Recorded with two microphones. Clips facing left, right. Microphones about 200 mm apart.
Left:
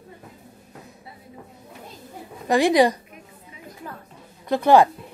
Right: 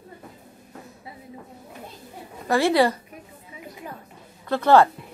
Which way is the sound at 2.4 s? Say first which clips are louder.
Left 2 dB; 15° left (ahead or behind).